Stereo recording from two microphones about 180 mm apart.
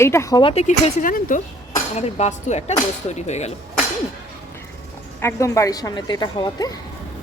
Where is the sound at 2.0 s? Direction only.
40° left (ahead or behind).